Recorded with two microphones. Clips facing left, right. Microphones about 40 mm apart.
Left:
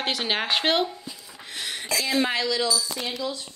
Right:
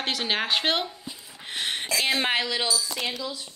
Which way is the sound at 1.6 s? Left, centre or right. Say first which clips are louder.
Right 1 dB; right.